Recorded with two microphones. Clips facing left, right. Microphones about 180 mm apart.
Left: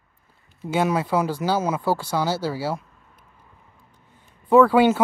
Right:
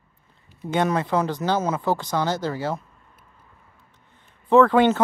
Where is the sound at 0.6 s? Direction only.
5° left (ahead or behind).